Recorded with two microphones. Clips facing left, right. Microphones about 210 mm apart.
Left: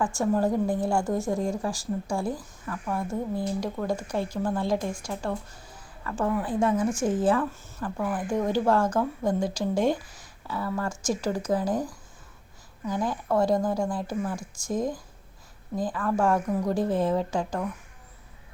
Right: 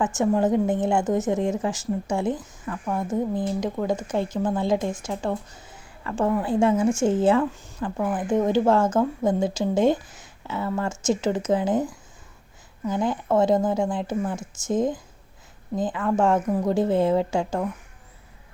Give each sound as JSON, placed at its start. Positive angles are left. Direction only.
{"t": 0.0, "sound": "a woman's voice", "side_deg": -20}